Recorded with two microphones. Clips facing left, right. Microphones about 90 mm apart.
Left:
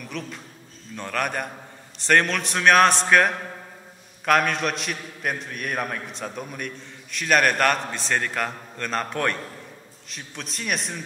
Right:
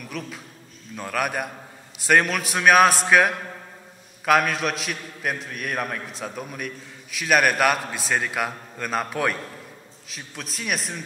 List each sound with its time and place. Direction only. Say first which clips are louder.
0.0 s a man's voice: even; 5° right (ahead or behind)